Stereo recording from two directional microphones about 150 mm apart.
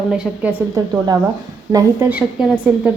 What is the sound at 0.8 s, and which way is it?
Speech, 25° right (ahead or behind).